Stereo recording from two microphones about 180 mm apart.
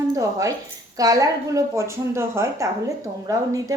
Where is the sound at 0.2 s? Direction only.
15° right (ahead or behind).